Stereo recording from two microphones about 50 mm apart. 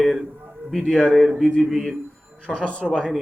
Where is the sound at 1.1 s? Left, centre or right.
Centre.